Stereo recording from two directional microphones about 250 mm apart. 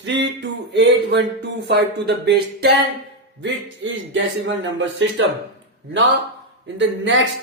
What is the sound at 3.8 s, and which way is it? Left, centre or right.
Speech, right.